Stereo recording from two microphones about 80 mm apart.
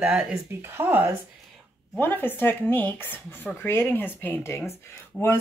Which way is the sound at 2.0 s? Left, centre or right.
Left.